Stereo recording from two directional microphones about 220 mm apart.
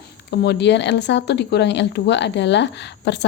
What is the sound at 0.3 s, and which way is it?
Speech, 50° left (ahead or behind).